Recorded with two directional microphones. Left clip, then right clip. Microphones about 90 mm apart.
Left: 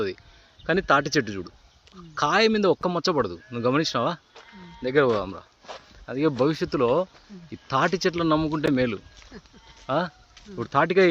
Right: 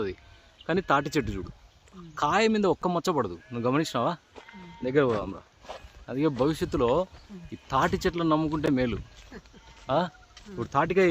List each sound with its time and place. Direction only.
0.6 s a man's voice: 15° left (ahead or behind)
0.9 s speech: 5° left (ahead or behind)
4.8 s speech: 35° left (ahead or behind)
6.1 s speech: 15° left (ahead or behind)
6.5 s speech: 5° left (ahead or behind)
9.3 s speech: 10° right (ahead or behind)
10.5 s speech: 20° left (ahead or behind)